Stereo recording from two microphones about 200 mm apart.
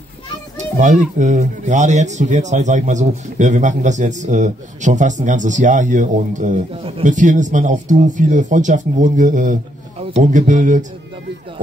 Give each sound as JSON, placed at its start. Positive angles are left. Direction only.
{"t": 0.7, "sound": "speech", "side_deg": -40}